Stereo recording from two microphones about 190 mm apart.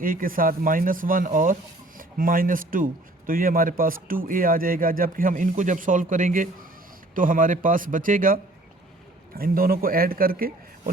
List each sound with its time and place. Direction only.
0.0 s speech: 45° right (ahead or behind)